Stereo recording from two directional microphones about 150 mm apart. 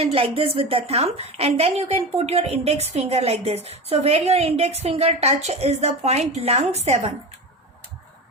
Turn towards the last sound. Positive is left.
turn(degrees=-45)  # may be behind; listen again after turning